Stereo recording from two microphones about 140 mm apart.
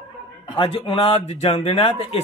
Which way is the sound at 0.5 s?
35° left (ahead or behind).